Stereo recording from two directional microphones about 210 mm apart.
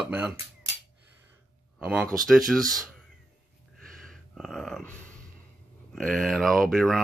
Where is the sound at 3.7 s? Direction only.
Centre (ahead or behind).